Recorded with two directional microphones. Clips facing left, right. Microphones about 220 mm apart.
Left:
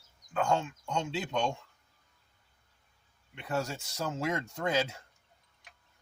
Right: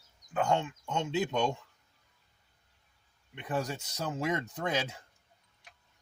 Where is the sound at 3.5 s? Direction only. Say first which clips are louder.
Even; 15° right (ahead or behind).